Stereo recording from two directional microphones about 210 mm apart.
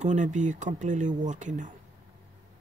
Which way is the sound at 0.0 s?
35° right (ahead or behind).